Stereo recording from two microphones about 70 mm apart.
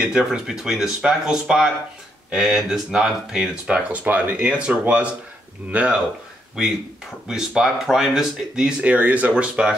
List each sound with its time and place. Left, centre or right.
0.0 s speech: centre
7.2 s speech: centre